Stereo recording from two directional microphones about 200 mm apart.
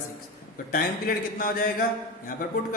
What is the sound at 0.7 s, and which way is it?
A man's voice, 45° left (ahead or behind).